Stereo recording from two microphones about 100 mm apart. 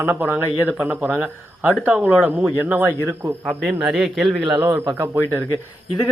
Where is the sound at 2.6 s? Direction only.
15° right (ahead or behind).